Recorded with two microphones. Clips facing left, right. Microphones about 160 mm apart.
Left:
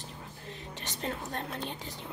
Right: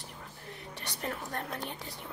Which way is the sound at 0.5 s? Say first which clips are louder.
Left 1 dB; 20° left (ahead or behind).